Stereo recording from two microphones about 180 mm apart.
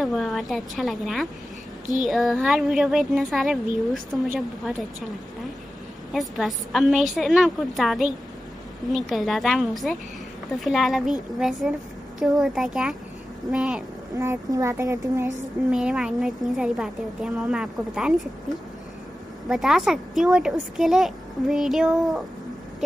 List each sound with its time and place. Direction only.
0.0 s speech: centre (ahead or behind)
6.1 s speech: centre (ahead or behind)
14.1 s speech: 15° right (ahead or behind)
15.7 s speech: 5° right (ahead or behind)
19.5 s speech: centre (ahead or behind)